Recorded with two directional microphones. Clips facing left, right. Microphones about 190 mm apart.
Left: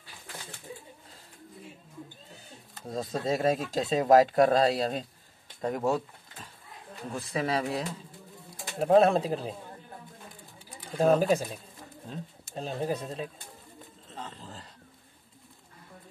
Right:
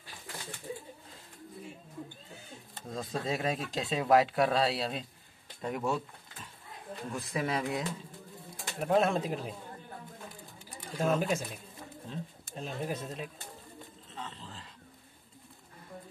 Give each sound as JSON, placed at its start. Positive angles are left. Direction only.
{"t": 2.9, "sound": "speech", "side_deg": 40}
{"t": 7.1, "sound": "speech", "side_deg": 30}
{"t": 11.0, "sound": "speech", "side_deg": 35}
{"t": 14.1, "sound": "a sound", "side_deg": 40}